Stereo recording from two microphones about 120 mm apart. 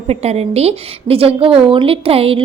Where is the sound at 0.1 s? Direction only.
60° right (ahead or behind).